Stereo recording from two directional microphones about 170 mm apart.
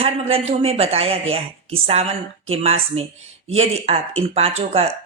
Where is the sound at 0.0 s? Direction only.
35° right (ahead or behind).